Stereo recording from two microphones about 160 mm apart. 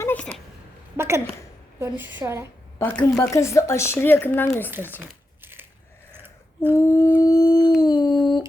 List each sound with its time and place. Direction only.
0.0 s a sound: 10° left (ahead or behind)
0.9 s a woman's voice: 15° right (ahead or behind)
2.7 s speech: 10° left (ahead or behind)
4.9 s crumpling: 15° right (ahead or behind)
6.1 s scissors: 15° right (ahead or behind)
6.7 s speech: 20° left (ahead or behind)
7.2 s dog: 25° left (ahead or behind)
7.8 s howl: 25° left (ahead or behind)